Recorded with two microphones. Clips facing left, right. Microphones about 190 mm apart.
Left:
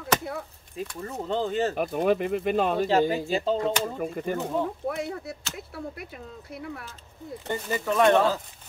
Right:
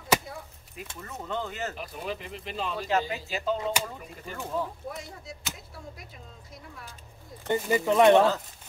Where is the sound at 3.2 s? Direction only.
30° left (ahead or behind).